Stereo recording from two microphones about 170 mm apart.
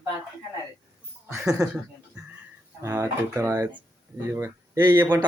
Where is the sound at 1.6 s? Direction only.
20° right (ahead or behind).